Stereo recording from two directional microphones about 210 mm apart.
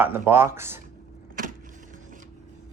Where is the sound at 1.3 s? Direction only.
40° right (ahead or behind).